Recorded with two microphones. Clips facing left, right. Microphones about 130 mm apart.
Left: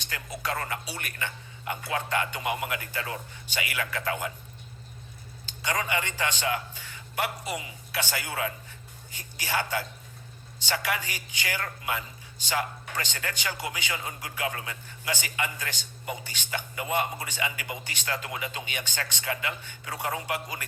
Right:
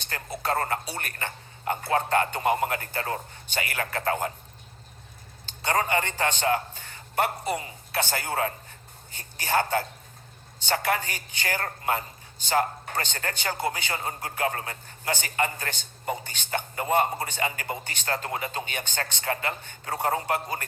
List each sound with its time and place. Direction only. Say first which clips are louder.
0.1 s a woman's voice: right 4 dB; 40° right (ahead or behind)
5.6 s a man's voice: right 4 dB; 40° right (ahead or behind)